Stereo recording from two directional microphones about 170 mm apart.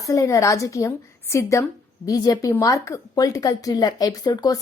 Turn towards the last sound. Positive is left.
turn(degrees=20)  # may be behind; listen again after turning